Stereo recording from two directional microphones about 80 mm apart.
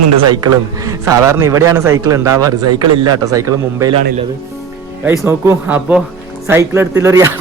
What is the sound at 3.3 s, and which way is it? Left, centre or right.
Speech, right.